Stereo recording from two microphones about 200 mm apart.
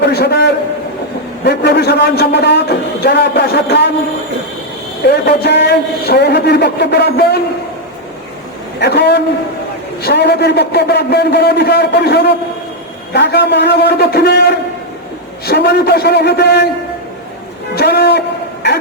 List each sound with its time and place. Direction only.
0.0 s a man's voice: 55° left (ahead or behind)
5.0 s a man's voice: 55° left (ahead or behind)
8.8 s a man's voice: 55° left (ahead or behind)
15.4 s a man's voice: 55° left (ahead or behind)
17.7 s a sound: 55° left (ahead or behind)